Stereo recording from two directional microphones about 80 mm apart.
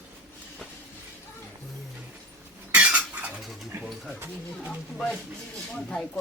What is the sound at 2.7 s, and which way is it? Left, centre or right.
Cutlery, centre.